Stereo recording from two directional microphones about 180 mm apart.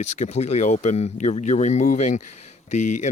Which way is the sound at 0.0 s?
40° left (ahead or behind).